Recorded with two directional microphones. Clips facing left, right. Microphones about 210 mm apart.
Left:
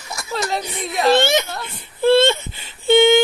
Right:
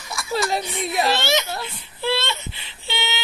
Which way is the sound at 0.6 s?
40° left (ahead or behind).